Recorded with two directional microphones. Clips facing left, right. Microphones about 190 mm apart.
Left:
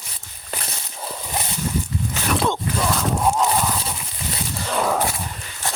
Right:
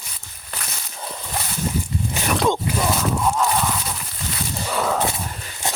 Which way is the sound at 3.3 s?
25° left (ahead or behind).